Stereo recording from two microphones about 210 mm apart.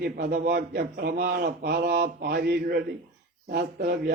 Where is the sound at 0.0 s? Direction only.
45° right (ahead or behind).